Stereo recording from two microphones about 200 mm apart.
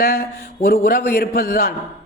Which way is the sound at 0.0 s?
50° left (ahead or behind).